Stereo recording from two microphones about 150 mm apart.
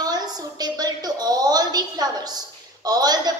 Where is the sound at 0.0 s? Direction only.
25° right (ahead or behind).